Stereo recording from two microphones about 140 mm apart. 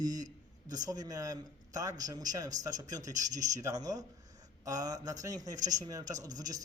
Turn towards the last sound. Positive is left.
turn(degrees=-25)  # may be behind; listen again after turning